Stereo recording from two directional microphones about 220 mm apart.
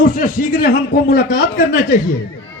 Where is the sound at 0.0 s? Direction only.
40° left (ahead or behind).